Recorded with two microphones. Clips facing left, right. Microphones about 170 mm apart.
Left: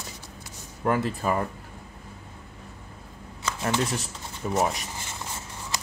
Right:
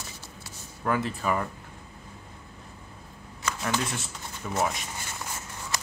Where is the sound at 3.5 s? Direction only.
25° left (ahead or behind).